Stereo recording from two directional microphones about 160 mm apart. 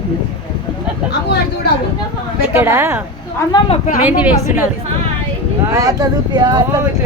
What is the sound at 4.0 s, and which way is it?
Speech, 10° right (ahead or behind).